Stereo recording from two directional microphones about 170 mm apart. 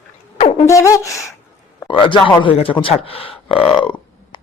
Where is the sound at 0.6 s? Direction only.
15° left (ahead or behind).